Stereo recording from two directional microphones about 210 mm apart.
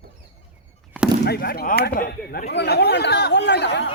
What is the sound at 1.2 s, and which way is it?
Speech, 50° left (ahead or behind).